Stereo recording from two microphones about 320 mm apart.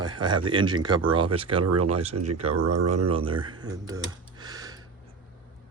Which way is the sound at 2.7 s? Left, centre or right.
Right.